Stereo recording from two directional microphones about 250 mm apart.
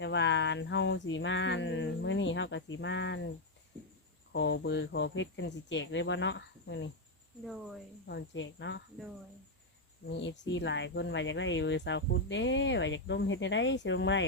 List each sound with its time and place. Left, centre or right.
0.0 s cricket: left
4.3 s speech: left
7.4 s speech: centre
8.0 s speech: left
10.1 s speech: left